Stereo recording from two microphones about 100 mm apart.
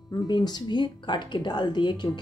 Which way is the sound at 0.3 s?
45° left (ahead or behind).